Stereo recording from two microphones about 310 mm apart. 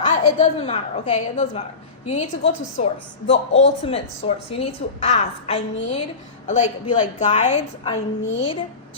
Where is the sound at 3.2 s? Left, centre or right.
Left.